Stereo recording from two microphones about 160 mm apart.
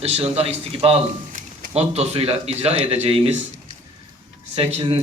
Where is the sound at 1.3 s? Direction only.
50° right (ahead or behind).